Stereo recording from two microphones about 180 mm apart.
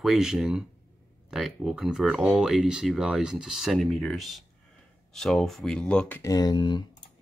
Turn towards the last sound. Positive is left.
turn(degrees=25)  # may be behind; listen again after turning